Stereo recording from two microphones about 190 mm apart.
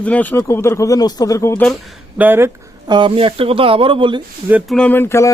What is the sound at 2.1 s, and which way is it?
Speech, 10° right (ahead or behind).